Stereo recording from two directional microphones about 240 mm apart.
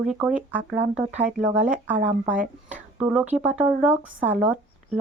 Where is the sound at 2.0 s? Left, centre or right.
Right.